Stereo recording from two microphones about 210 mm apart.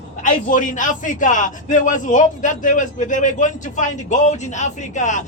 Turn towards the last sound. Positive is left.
turn(degrees=35)  # may be behind; listen again after turning